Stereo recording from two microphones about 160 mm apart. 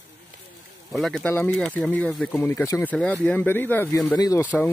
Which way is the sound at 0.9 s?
Centre (ahead or behind).